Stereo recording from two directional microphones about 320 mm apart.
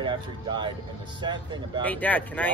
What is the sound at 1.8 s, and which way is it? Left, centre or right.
Speech, centre.